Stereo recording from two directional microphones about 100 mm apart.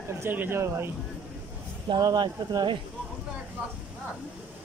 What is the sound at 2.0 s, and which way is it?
Speech, 40° right (ahead or behind).